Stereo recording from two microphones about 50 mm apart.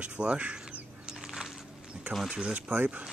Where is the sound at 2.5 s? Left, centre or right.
Right.